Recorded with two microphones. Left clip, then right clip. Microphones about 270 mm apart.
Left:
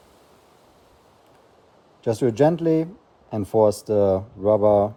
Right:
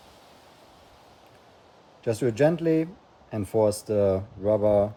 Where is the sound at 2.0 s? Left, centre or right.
Left.